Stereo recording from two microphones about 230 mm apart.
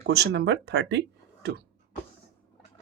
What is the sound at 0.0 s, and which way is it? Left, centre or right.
Speech, right.